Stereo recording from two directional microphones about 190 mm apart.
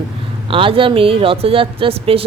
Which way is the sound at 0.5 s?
25° right (ahead or behind).